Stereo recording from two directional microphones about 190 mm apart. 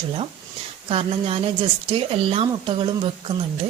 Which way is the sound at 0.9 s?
30° right (ahead or behind).